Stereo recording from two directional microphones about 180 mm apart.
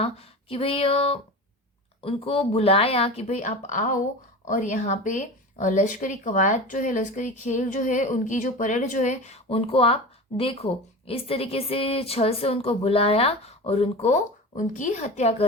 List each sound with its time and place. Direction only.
0.0 s speech: 30° left (ahead or behind)